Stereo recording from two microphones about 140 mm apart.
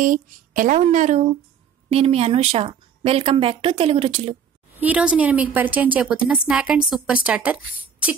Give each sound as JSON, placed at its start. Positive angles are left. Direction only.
{"t": 0.0, "sound": "speech", "side_deg": -70}
{"t": 1.9, "sound": "a woman's voice", "side_deg": -45}
{"t": 4.7, "sound": "a woman's voice", "side_deg": -10}